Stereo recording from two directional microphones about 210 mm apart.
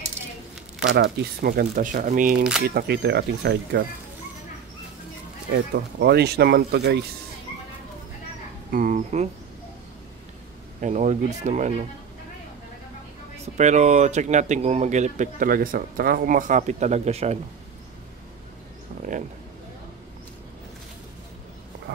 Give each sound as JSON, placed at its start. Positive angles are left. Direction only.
{"t": 0.9, "sound": "speech", "side_deg": -50}
{"t": 5.5, "sound": "speech", "side_deg": -50}
{"t": 8.7, "sound": "speech", "side_deg": -40}
{"t": 10.8, "sound": "speech", "side_deg": -35}
{"t": 13.6, "sound": "speech", "side_deg": -35}